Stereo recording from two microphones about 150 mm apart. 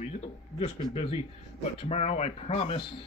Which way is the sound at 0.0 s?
45° left (ahead or behind).